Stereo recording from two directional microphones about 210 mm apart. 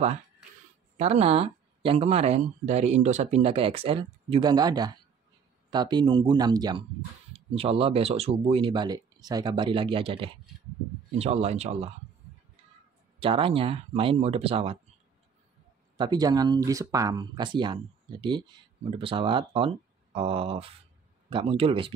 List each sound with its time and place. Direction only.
0.9 s speech: 30° right (ahead or behind)
13.2 s speech: 25° right (ahead or behind)
16.0 s speech: 20° right (ahead or behind)